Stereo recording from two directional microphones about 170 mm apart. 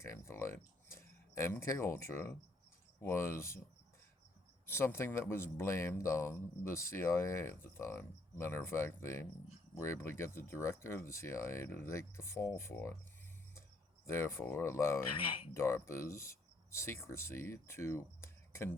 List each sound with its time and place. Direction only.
0.0 s speech: 15° left (ahead or behind)
4.6 s speech: 15° left (ahead or behind)
15.1 s speech: 30° left (ahead or behind)
15.5 s speech: 15° left (ahead or behind)